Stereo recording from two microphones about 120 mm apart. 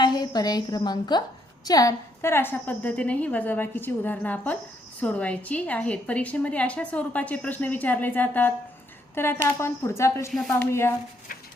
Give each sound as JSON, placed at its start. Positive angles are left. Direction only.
{"t": 0.0, "sound": "a woman's voice", "side_deg": 35}